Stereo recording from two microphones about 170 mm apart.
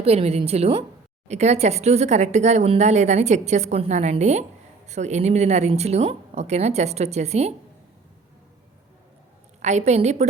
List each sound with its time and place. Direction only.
0.0 s speech: 35° right (ahead or behind)
9.6 s a woman's voice: 45° right (ahead or behind)